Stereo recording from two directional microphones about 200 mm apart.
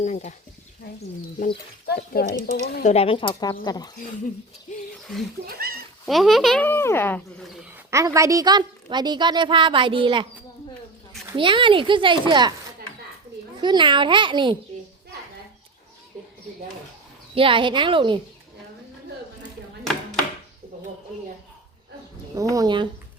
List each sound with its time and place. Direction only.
0.0 s speech: 35° left (ahead or behind)
2.1 s speech: 50° left (ahead or behind)
2.9 s speech: 30° left (ahead or behind)
4.7 s a sound: 40° left (ahead or behind)
5.5 s a sound: 50° right (ahead or behind)
6.1 s a child's voice: centre (ahead or behind)
7.4 s a sound: centre (ahead or behind)
7.9 s a woman's voice: 15° right (ahead or behind)
11.3 s a woman's voice: 25° right (ahead or behind)
13.6 s a woman's voice: 25° right (ahead or behind)
17.3 s a woman's voice: 25° right (ahead or behind)
19.8 s a sound: centre (ahead or behind)
22.4 s a woman's voice: 15° right (ahead or behind)